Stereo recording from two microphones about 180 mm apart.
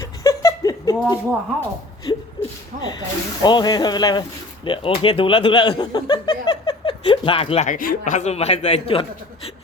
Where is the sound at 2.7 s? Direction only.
45° right (ahead or behind).